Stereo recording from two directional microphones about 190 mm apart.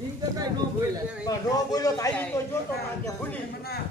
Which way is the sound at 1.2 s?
20° left (ahead or behind).